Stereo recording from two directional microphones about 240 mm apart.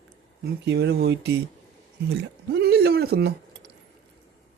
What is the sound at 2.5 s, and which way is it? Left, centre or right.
Speech, right.